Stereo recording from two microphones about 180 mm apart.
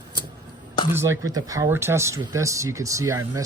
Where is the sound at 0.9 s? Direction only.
15° right (ahead or behind).